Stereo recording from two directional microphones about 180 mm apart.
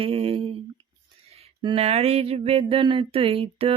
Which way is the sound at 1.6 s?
35° right (ahead or behind).